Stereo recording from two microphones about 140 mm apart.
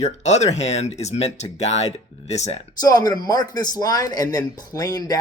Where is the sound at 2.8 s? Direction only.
25° left (ahead or behind).